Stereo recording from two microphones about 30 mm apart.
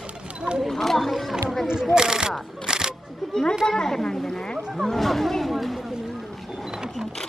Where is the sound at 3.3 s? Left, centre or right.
Left.